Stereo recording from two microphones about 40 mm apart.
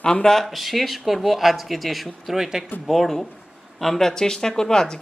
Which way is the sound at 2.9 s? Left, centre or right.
Centre.